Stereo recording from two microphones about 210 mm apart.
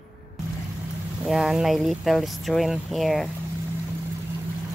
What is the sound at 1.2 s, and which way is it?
Speech, centre (ahead or behind).